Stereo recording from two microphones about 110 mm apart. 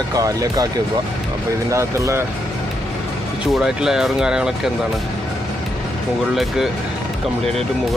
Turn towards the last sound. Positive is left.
turn(degrees=0)  # may be behind; listen again after turning